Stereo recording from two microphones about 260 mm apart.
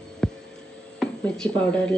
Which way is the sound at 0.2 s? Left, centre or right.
Centre.